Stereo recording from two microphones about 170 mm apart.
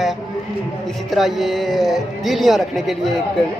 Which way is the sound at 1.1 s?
Centre (ahead or behind).